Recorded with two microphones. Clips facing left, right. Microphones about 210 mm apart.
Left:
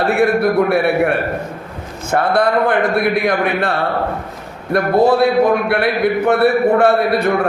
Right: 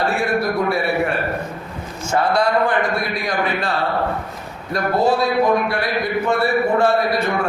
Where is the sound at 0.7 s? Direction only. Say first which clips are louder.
Left 5 dB; 60° left (ahead or behind).